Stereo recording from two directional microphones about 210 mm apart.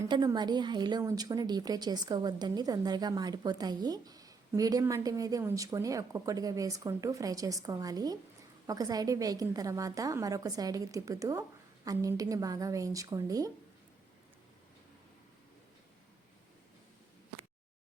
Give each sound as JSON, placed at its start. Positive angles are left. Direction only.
{"t": 0.1, "sound": "a woman's voice", "side_deg": -20}